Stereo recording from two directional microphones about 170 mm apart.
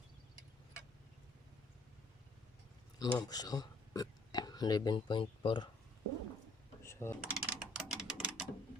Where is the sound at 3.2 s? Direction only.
25° left (ahead or behind).